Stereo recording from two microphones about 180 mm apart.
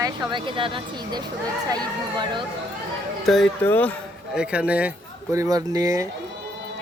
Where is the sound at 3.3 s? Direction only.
Centre (ahead or behind).